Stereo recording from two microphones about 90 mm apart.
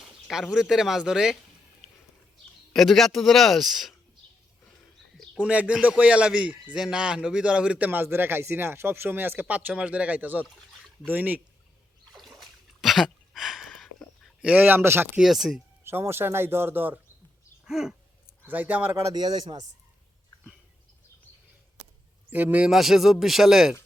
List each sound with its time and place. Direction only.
0.0 s speech: 5° right (ahead or behind)
2.7 s speech: centre (ahead or behind)
5.4 s a man's voice: 15° right (ahead or behind)
12.1 s a sound: centre (ahead or behind)
14.4 s speech: 15° right (ahead or behind)
15.2 s speech: 5° right (ahead or behind)
15.8 s speech: 25° right (ahead or behind)
17.7 s a sound: 5° right (ahead or behind)
18.4 s speech: 20° right (ahead or behind)
19.1 s speech: 50° right (ahead or behind)
22.3 s speech: 20° right (ahead or behind)
22.6 s speech: 5° right (ahead or behind)